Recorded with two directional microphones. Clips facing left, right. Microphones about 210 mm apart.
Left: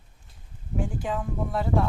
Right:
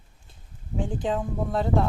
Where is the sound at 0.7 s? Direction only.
20° right (ahead or behind).